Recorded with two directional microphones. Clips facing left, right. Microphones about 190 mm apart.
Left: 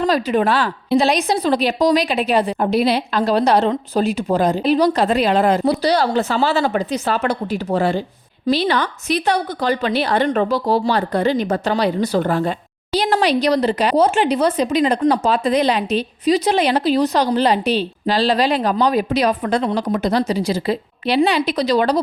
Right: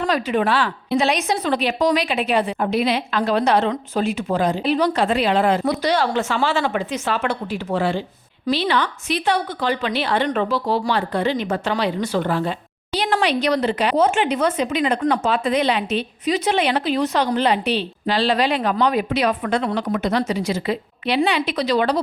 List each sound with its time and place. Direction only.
0.1 s a woman's voice: 40° left (ahead or behind)